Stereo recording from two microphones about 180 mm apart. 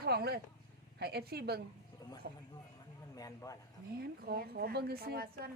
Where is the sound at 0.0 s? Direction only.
60° right (ahead or behind).